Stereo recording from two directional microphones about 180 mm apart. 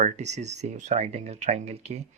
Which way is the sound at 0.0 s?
40° right (ahead or behind).